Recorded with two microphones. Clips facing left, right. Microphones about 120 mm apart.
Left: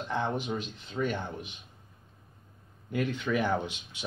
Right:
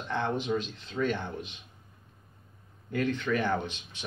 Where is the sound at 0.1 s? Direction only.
10° left (ahead or behind).